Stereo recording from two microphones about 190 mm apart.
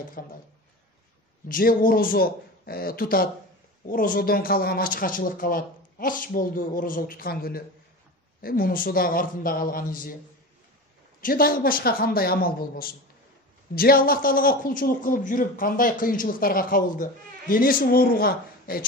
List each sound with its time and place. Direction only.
0.2 s speech: 50° left (ahead or behind)
1.5 s speech: 50° left (ahead or behind)
11.1 s speech: 50° left (ahead or behind)